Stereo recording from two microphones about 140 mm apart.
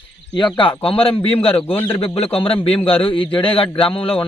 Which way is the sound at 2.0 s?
45° left (ahead or behind).